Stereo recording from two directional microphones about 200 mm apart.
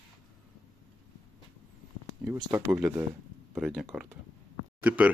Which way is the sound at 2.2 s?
15° right (ahead or behind).